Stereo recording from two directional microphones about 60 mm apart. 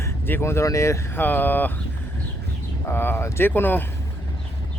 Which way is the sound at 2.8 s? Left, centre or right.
Left.